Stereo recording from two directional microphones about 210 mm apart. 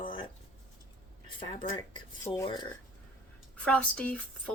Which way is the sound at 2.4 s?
20° left (ahead or behind).